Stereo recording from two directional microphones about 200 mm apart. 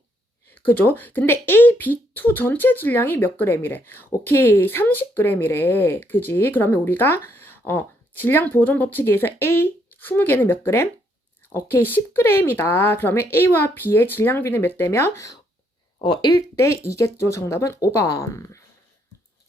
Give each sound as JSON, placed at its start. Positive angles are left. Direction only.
{"t": 0.4, "sound": "speech", "side_deg": 10}